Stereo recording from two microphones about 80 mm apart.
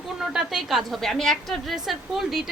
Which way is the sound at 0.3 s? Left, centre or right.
Centre.